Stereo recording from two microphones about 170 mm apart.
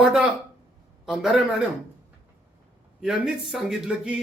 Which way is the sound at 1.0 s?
5° right (ahead or behind).